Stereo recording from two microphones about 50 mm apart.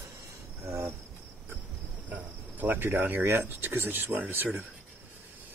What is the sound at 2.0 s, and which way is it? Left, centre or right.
Cricket, right.